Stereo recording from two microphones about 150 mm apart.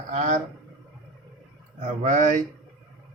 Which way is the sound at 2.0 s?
55° right (ahead or behind).